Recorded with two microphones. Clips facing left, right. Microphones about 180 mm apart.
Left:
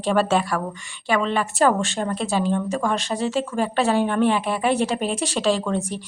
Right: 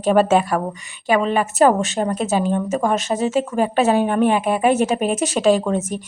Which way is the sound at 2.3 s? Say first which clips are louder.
Right 2 dB; 45° right (ahead or behind).